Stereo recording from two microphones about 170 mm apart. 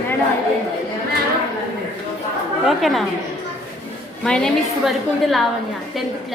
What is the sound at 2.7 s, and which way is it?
Speech, centre (ahead or behind).